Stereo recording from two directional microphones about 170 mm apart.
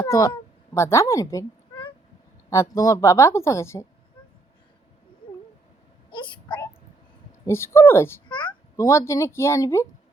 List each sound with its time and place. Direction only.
0.0 s a woman's voice: 15° left (ahead or behind)
6.1 s a sound: 30° left (ahead or behind)
7.4 s a woman's voice: 15° left (ahead or behind)
8.3 s a child's voice: 30° left (ahead or behind)